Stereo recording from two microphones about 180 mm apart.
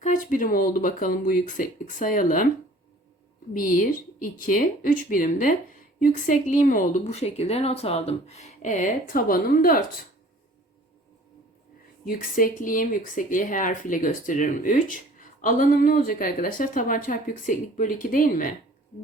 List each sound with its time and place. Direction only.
0.0 s speech: 45° left (ahead or behind)
3.5 s speech: 50° left (ahead or behind)
12.0 s speech: 50° left (ahead or behind)